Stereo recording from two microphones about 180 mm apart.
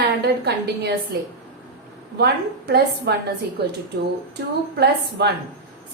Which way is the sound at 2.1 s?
65° right (ahead or behind).